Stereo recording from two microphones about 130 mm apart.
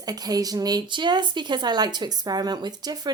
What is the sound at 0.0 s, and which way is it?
Speech, 30° right (ahead or behind).